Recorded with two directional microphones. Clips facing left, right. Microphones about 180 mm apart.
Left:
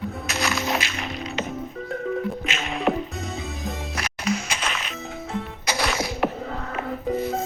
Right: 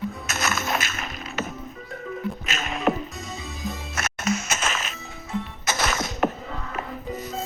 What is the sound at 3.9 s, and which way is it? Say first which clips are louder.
Music: even; 45° right (ahead or behind).